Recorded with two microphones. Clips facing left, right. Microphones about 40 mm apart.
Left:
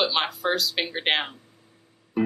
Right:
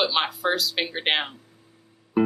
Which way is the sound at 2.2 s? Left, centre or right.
Centre.